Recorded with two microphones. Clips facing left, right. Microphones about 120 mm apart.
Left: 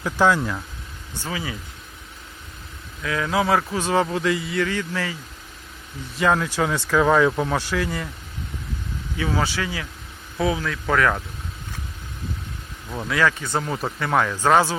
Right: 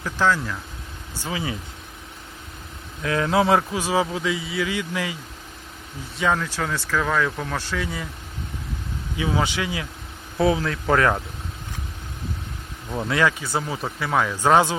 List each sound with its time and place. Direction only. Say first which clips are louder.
0.0 s speech: left 3 dB; 15° left (ahead or behind)
1.3 s speech: right 2 dB; 25° right (ahead or behind)
3.0 s speech: right 2 dB; 30° right (ahead or behind); by 5.1 s 15° right (ahead or behind)
6.1 s speech: left 3 dB; 5° left (ahead or behind)
7.8 s speech: left 3 dB; centre (ahead or behind)
9.1 s speech: even; 15° right (ahead or behind)
10.3 s speech: right 3 dB; 30° right (ahead or behind)
13.2 s speech: left 1 dB; 5° right (ahead or behind)
14.3 s speech: right 2 dB; 15° right (ahead or behind)